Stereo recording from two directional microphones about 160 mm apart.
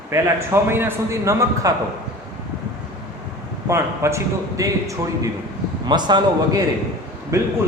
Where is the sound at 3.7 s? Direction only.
15° right (ahead or behind).